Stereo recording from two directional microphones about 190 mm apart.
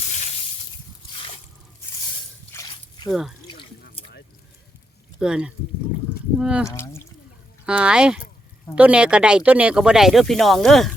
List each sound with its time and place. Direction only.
2.5 s a sound: 15° left (ahead or behind)
3.1 s speech: centre (ahead or behind)
3.4 s drip: 25° left (ahead or behind)
5.2 s speech: 5° right (ahead or behind)
6.7 s speech: 15° left (ahead or behind)
7.6 s speech: 5° right (ahead or behind)